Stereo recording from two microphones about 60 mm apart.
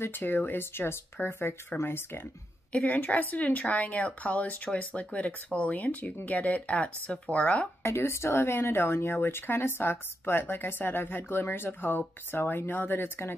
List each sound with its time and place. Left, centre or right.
0.0 s speech: left
2.8 s speech: left
7.8 s speech: left